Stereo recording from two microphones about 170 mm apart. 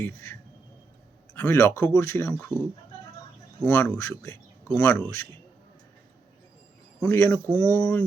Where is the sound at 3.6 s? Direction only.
10° left (ahead or behind).